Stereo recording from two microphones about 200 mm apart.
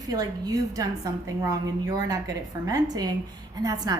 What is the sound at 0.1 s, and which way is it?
A woman's voice, 20° right (ahead or behind).